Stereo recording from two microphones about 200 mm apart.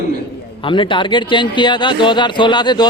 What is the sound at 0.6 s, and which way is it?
Speech, 25° left (ahead or behind).